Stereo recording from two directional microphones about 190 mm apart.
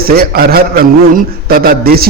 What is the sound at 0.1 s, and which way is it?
A man's voice, 50° right (ahead or behind).